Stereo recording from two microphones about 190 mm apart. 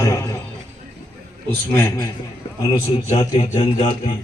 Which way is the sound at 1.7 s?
15° left (ahead or behind).